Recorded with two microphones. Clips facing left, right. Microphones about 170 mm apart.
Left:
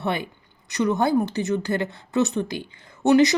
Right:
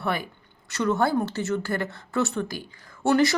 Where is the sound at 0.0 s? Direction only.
20° left (ahead or behind).